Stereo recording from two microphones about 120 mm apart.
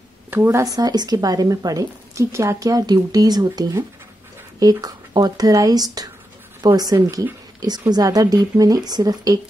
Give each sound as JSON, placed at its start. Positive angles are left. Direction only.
{"t": 0.3, "sound": "a woman's voice", "side_deg": -20}